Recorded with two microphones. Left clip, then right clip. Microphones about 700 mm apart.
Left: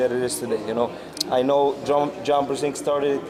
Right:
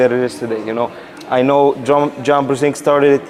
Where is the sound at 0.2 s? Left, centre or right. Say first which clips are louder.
Right 6 dB; right.